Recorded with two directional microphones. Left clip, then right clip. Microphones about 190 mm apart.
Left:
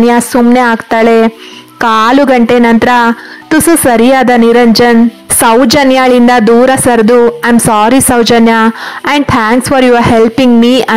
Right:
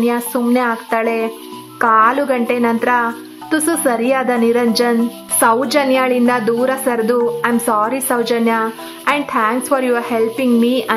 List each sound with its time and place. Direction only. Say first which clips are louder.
0.0 s a woman's voice: left 10 dB; 45° left (ahead or behind)